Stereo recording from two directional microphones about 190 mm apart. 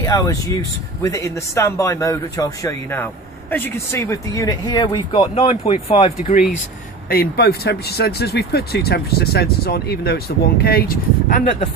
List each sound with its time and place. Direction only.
0.0 s a man's voice: 20° left (ahead or behind)
7.1 s speech: 55° left (ahead or behind)